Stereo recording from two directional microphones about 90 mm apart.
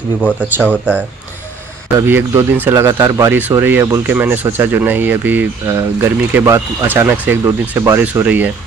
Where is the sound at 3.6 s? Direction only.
20° right (ahead or behind).